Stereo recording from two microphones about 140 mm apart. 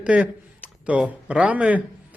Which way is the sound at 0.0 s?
10° right (ahead or behind).